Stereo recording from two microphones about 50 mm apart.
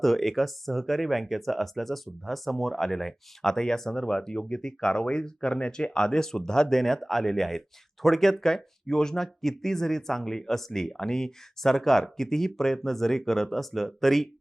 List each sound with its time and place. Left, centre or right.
0.0 s speech: centre